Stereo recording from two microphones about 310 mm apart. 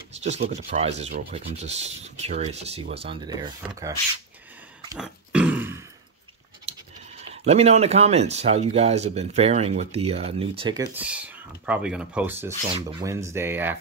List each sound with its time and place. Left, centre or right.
0.2 s speech: right
4.8 s a sound: centre
6.7 s goat: right
7.2 s speech: right